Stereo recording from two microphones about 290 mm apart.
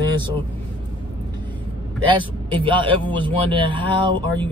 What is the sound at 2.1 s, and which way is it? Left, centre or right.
Speech, centre.